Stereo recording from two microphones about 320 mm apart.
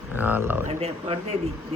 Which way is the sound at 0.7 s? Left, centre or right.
Centre.